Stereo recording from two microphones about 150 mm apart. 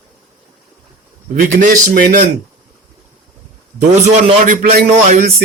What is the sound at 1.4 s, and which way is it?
Speech, 65° right (ahead or behind).